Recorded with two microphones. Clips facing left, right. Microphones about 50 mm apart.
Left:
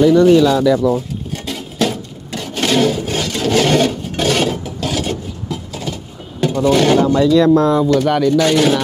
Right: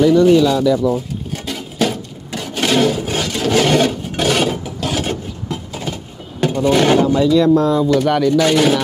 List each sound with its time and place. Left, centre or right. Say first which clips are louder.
0.1 s speech: left 1 dB; left
1.3 s a sound: even; centre
5.0 s a sound: even; right
6.4 s speech: left 1 dB; right
7.1 s speech: left 1 dB; left
7.9 s speech: left 1 dB; centre